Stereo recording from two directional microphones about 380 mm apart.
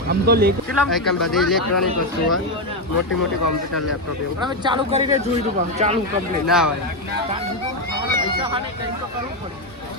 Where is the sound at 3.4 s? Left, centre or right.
Left.